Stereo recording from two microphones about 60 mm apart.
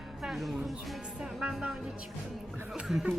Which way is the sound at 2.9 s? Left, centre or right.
Centre.